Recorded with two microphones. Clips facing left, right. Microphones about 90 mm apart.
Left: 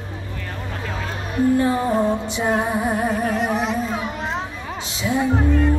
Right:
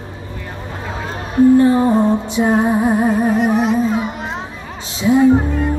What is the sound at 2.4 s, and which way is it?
Music, 25° right (ahead or behind).